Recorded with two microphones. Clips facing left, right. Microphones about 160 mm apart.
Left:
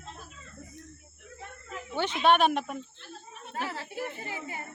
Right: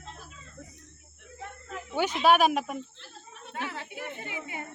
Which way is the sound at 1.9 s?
10° right (ahead or behind).